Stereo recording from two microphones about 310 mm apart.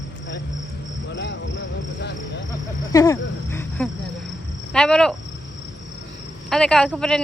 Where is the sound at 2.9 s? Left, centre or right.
Centre.